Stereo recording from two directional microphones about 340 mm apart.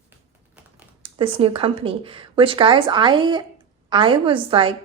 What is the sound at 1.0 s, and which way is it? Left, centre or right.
Speech, centre.